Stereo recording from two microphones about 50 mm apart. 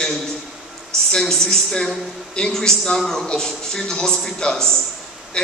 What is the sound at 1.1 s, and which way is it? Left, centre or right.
A man's voice, centre.